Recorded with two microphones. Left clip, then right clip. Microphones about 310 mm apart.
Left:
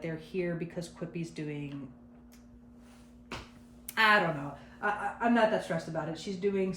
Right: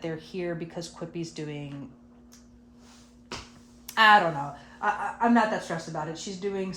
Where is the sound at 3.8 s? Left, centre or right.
Centre.